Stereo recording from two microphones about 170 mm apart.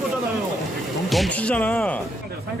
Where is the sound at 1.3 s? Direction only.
5° left (ahead or behind).